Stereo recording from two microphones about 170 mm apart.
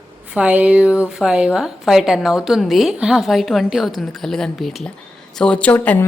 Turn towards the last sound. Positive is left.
turn(degrees=10)  # may be behind; listen again after turning